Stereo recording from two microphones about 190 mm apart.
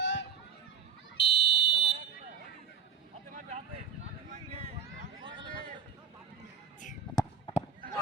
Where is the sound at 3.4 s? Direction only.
40° right (ahead or behind).